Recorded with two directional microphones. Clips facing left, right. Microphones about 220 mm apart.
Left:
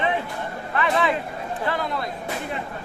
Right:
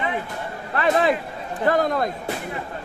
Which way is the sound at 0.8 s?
35° right (ahead or behind).